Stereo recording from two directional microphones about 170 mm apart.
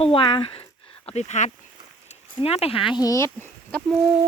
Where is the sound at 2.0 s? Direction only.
40° left (ahead or behind).